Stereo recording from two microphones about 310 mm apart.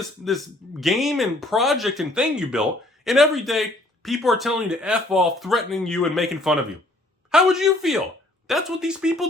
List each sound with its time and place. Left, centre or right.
0.3 s speech: centre